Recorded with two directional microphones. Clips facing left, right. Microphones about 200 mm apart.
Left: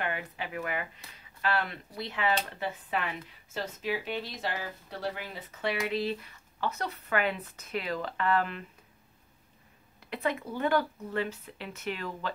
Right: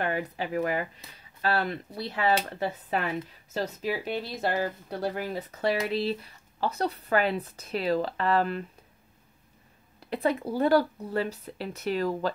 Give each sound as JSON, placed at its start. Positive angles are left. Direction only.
{"t": 0.0, "sound": "speech", "side_deg": -40}
{"t": 10.0, "sound": "speech", "side_deg": -35}